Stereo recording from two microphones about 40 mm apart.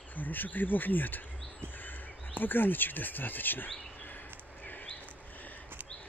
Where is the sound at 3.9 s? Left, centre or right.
Left.